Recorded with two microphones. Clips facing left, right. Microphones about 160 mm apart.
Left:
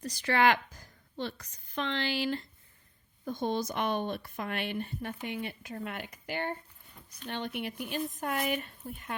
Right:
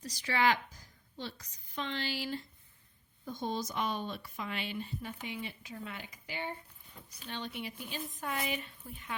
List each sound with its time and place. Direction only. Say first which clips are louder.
0.0 s a woman's voice: left 4 dB; 60° left (ahead or behind)